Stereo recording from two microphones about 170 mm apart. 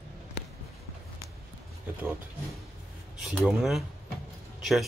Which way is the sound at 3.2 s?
5° right (ahead or behind).